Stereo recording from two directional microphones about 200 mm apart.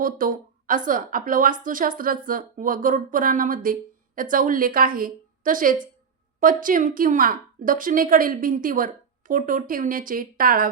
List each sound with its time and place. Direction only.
0.0 s a woman's voice: 45° right (ahead or behind)